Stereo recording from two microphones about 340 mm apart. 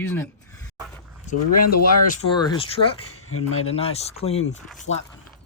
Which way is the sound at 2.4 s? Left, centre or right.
Centre.